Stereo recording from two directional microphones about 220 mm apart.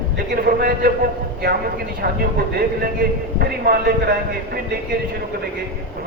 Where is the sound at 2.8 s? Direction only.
45° right (ahead or behind).